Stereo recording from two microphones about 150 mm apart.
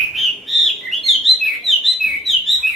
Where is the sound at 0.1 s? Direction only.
Centre (ahead or behind).